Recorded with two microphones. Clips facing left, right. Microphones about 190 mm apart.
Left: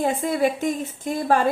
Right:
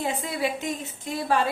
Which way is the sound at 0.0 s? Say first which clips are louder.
Left 6 dB; 50° left (ahead or behind).